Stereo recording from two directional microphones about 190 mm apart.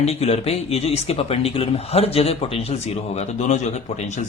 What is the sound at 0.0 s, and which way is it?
Speech, 35° left (ahead or behind).